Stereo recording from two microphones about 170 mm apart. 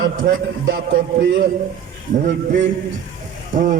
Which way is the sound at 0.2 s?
55° right (ahead or behind).